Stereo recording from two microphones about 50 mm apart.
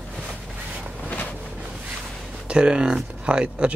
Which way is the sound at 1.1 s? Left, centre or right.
Left.